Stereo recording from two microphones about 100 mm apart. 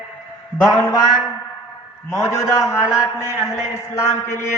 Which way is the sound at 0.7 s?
30° left (ahead or behind).